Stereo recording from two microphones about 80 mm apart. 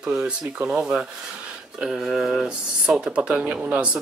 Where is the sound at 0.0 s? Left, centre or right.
Centre.